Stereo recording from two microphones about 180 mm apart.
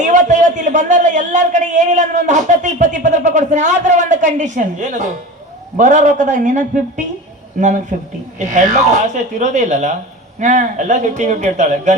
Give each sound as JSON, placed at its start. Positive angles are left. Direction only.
{"t": 0.0, "sound": "a man's voice", "side_deg": -45}